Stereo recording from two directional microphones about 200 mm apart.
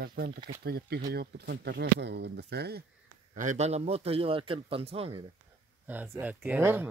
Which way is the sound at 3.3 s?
40° right (ahead or behind).